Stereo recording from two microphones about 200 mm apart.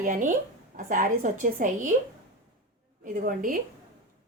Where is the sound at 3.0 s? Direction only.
45° right (ahead or behind).